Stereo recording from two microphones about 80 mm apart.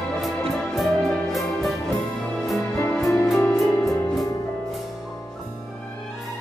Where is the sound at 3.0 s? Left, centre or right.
Left.